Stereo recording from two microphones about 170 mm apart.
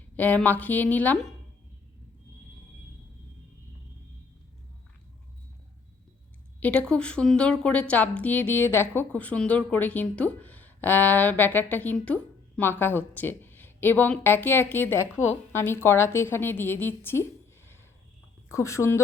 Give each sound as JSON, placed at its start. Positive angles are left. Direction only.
{"t": 0.2, "sound": "speech", "side_deg": 10}
{"t": 6.6, "sound": "a woman's voice", "side_deg": 10}
{"t": 18.5, "sound": "speech", "side_deg": 20}